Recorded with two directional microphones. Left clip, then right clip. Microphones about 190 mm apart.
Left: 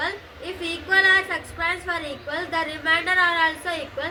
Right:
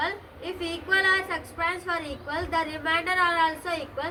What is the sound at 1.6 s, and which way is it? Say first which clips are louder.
A woman's voice: left 2 dB; 15° right (ahead or behind).